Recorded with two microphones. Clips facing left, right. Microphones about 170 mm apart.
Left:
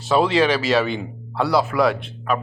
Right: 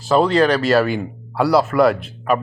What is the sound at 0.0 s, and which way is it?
A man's voice, centre (ahead or behind).